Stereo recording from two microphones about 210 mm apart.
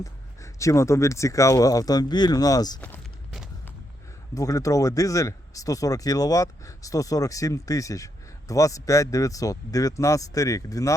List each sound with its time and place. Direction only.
0.0 s speech: 15° left (ahead or behind)
2.8 s walk: 5° left (ahead or behind)
4.4 s speech: 15° left (ahead or behind)